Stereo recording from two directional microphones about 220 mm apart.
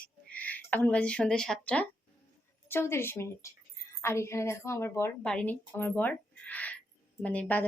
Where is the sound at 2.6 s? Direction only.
10° left (ahead or behind).